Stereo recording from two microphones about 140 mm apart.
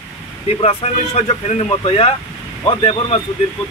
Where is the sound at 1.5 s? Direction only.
50° left (ahead or behind).